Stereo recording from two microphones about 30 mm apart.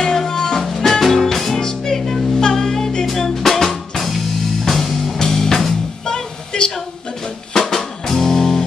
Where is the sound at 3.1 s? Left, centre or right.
Centre.